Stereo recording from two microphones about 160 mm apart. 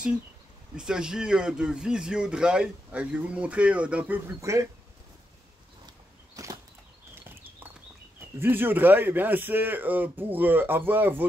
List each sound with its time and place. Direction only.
0.7 s a man's voice: 5° right (ahead or behind)
5.9 s a sound: 20° right (ahead or behind)
8.4 s speech: 15° right (ahead or behind)